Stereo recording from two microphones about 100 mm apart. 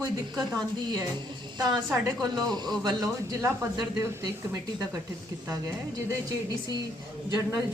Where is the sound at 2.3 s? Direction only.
45° right (ahead or behind).